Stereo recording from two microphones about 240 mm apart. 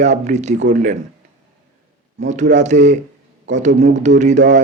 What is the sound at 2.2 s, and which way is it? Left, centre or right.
Speech, right.